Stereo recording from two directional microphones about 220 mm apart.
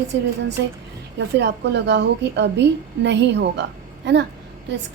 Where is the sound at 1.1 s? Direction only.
50° right (ahead or behind).